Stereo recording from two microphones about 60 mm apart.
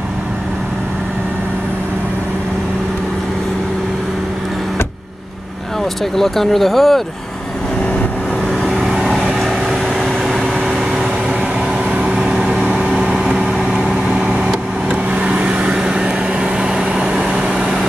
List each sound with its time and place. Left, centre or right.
6.1 s speech: centre
8.6 s vehicle: centre
11.9 s vehicle: centre
14.2 s vehicle: centre